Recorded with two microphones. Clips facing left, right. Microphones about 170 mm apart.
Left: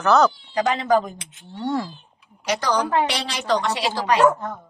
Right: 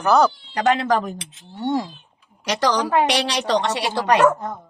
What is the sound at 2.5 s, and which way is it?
A woman's voice, 90° right.